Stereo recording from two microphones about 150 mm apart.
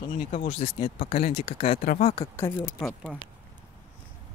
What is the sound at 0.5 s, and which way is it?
Speech, 40° left (ahead or behind).